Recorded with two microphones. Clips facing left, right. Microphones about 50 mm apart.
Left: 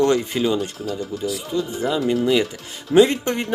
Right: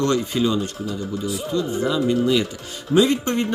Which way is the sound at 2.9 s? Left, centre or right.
Left.